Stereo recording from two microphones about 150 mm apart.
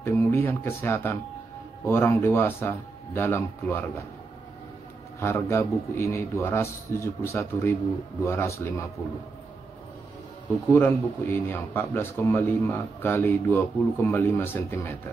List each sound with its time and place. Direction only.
0.0 s speech: 15° left (ahead or behind)
5.2 s speech: 15° left (ahead or behind)
10.7 s speech: 15° left (ahead or behind)